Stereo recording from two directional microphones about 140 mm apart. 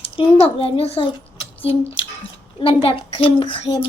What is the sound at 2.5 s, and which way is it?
A child's voice, 40° left (ahead or behind).